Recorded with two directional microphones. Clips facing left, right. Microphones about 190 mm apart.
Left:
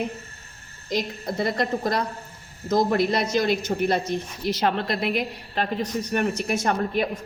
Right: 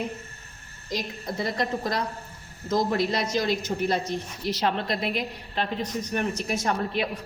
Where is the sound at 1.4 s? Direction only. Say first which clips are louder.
Left 3 dB; 55° left (ahead or behind).